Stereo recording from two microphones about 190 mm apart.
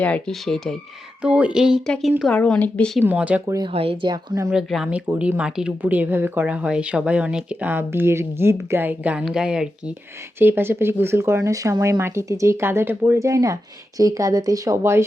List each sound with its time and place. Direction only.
0.0 s speech: 5° left (ahead or behind)
3.0 s speech: 10° right (ahead or behind)
3.4 s speech: 20° right (ahead or behind)
3.7 s a woman's voice: 30° right (ahead or behind)
4.5 s speech: 5° right (ahead or behind)